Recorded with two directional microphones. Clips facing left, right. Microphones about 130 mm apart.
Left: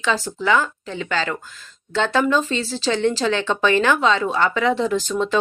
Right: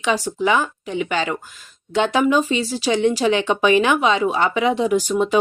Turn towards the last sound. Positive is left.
turn(degrees=-15)  # may be behind; listen again after turning